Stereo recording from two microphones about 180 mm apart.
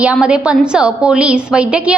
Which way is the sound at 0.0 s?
5° right (ahead or behind).